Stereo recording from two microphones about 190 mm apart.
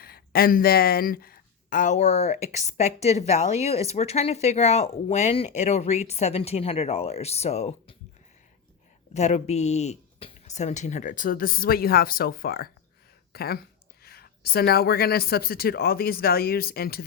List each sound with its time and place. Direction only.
0.0 s speech: 55° left (ahead or behind); by 7.9 s 35° left (ahead or behind)
9.1 s speech: 35° left (ahead or behind); by 17.0 s 55° left (ahead or behind)